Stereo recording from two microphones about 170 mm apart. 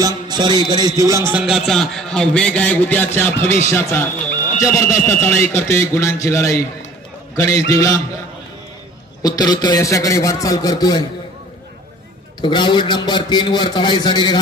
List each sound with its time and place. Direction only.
0.0 s music: 25° right (ahead or behind)
1.3 s a man's voice: 5° right (ahead or behind); by 8.0 s 20° left (ahead or behind)
9.2 s a man's voice: 25° left (ahead or behind)
12.4 s a man's voice: 25° left (ahead or behind)